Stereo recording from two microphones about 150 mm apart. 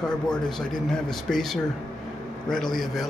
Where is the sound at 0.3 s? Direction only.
5° left (ahead or behind).